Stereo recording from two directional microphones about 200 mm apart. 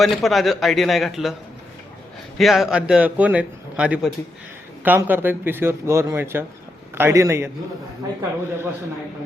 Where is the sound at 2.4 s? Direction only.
Centre (ahead or behind).